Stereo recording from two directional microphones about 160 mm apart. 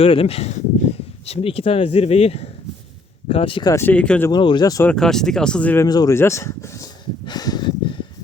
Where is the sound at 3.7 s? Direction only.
15° left (ahead or behind).